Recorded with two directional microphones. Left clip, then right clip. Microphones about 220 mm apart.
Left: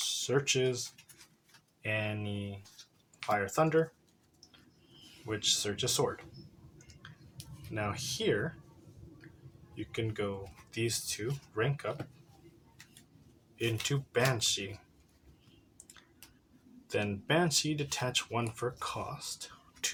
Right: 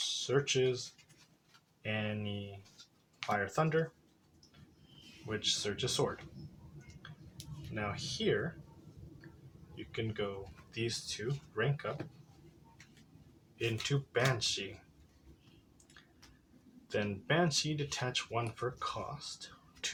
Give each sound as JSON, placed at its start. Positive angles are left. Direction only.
{"t": 0.3, "sound": "speech", "side_deg": 35}
{"t": 1.8, "sound": "speech", "side_deg": 30}
{"t": 5.2, "sound": "speech", "side_deg": 30}
{"t": 7.7, "sound": "speech", "side_deg": 35}
{"t": 9.7, "sound": "speech", "side_deg": 35}
{"t": 13.6, "sound": "speech", "side_deg": 25}
{"t": 16.9, "sound": "speech", "side_deg": 30}